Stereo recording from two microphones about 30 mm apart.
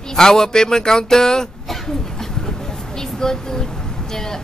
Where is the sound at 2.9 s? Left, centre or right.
Centre.